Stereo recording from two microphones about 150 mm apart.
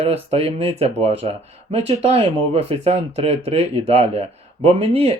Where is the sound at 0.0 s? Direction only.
40° right (ahead or behind).